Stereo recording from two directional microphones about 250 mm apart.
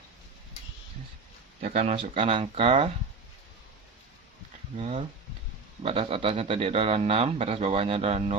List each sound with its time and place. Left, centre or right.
1.6 s speech: right
4.8 s speech: right